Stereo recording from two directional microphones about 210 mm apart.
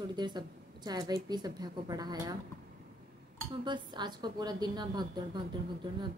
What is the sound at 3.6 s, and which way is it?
A woman's voice, 20° right (ahead or behind).